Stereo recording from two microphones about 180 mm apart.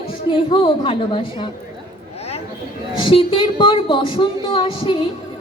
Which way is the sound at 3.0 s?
30° left (ahead or behind).